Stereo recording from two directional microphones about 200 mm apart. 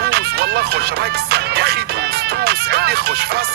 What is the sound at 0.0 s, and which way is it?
Music, 55° right (ahead or behind).